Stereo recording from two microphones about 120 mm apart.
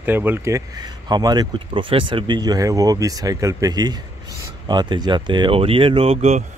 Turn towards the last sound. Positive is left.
turn(degrees=-65)  # may be behind; listen again after turning